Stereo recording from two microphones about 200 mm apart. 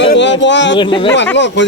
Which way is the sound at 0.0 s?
65° left (ahead or behind).